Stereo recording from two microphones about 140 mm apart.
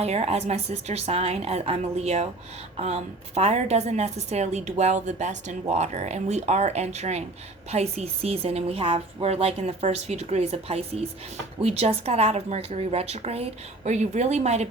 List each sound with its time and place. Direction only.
0.0 s a woman's voice: 50° right (ahead or behind)